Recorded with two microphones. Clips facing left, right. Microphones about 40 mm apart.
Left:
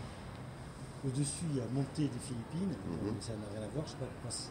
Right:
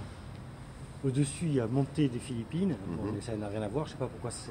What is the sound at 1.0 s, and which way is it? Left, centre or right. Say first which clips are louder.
Speech: right 7 dB; right.